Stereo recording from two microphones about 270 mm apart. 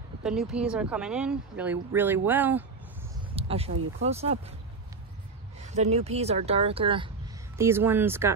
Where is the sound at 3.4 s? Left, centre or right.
Right.